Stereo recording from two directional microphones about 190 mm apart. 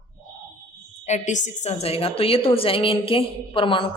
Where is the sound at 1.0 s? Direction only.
40° left (ahead or behind).